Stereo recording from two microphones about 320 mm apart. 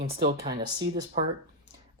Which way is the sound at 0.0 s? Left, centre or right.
Right.